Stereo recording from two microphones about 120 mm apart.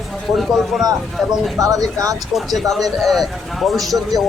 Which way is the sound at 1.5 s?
30° right (ahead or behind).